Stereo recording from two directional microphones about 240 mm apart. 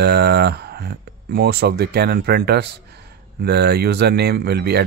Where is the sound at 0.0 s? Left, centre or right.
Right.